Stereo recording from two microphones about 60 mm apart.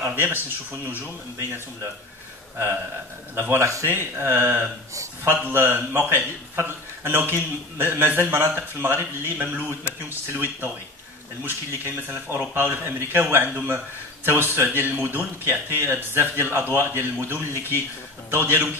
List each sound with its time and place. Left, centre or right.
0.1 s a man's voice: right
3.3 s a man's voice: right